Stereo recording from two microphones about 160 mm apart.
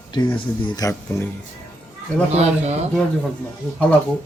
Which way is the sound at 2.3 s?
40° right (ahead or behind).